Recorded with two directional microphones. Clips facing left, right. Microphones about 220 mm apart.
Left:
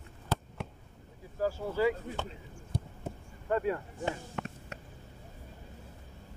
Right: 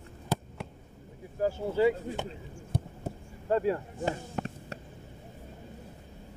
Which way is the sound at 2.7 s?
55° right (ahead or behind).